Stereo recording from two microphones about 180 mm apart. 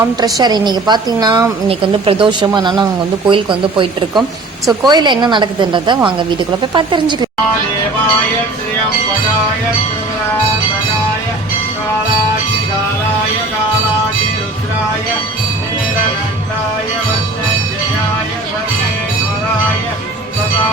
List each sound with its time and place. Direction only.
0.0 s a woman's voice: 20° right (ahead or behind)